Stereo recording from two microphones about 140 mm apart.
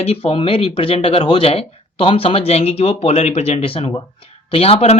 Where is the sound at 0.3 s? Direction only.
40° left (ahead or behind).